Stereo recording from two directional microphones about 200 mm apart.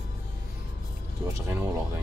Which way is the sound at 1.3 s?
10° right (ahead or behind).